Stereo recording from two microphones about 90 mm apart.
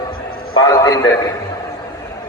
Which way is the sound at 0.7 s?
40° left (ahead or behind).